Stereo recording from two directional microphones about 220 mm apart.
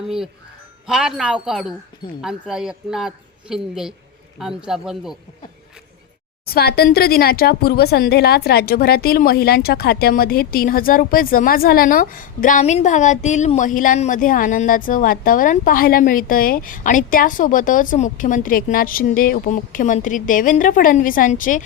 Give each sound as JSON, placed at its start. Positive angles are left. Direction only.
{"t": 0.9, "sound": "speech", "side_deg": -5}
{"t": 6.4, "sound": "speech", "side_deg": 45}